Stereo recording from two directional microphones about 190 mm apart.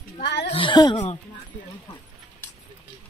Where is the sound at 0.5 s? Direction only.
25° left (ahead or behind).